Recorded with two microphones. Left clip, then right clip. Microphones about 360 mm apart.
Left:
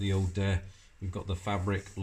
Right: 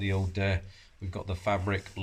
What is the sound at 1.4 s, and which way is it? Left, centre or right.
Speech, right.